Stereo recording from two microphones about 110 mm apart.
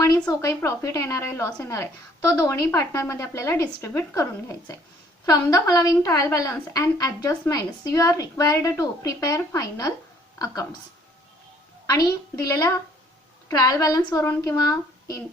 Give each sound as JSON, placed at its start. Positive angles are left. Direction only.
{"t": 0.0, "sound": "a woman's voice", "side_deg": 30}
{"t": 11.9, "sound": "a woman's voice", "side_deg": 35}